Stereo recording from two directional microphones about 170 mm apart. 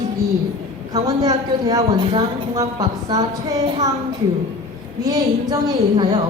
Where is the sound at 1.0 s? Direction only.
20° right (ahead or behind).